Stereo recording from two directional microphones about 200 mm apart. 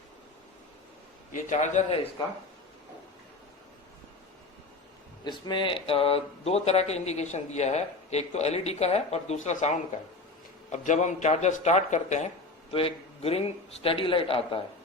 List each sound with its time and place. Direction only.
1.3 s speech: 35° left (ahead or behind)
5.2 s a man's voice: 25° left (ahead or behind)